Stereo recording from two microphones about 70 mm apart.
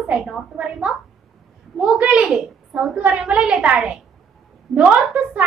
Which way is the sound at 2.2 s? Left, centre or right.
Centre.